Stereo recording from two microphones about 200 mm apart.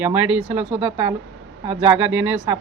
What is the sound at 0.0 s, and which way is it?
Speech, 10° right (ahead or behind).